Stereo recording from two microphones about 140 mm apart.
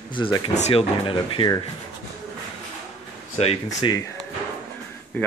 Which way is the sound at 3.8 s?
35° left (ahead or behind).